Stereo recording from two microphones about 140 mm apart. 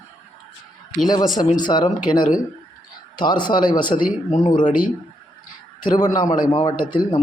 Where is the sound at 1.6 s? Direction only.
30° left (ahead or behind).